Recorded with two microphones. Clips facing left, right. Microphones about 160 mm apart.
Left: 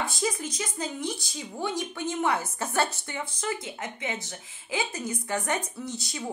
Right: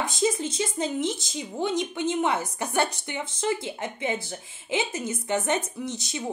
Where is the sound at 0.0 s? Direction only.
20° right (ahead or behind).